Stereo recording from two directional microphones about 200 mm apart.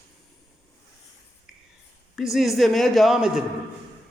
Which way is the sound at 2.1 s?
Centre (ahead or behind).